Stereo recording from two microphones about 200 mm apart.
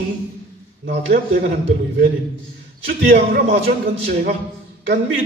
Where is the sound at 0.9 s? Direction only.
50° right (ahead or behind).